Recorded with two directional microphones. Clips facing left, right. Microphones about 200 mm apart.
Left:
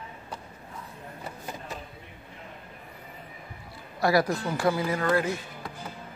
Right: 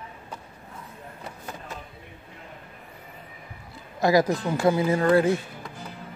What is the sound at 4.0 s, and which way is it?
Speech, 20° right (ahead or behind).